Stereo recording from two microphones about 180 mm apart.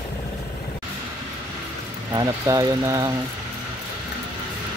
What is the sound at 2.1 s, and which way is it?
Speech, 20° right (ahead or behind).